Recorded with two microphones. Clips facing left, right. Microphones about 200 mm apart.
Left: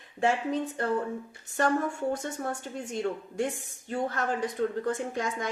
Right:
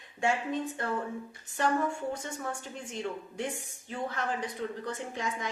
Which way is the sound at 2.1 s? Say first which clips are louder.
Left 4 dB; 40° left (ahead or behind).